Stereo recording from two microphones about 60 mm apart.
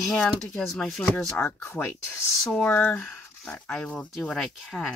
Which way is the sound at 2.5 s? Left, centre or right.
Left.